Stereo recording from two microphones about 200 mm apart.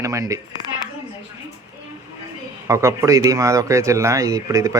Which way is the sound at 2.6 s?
15° right (ahead or behind).